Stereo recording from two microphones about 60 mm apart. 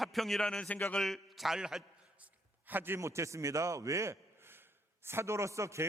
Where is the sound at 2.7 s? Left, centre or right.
Right.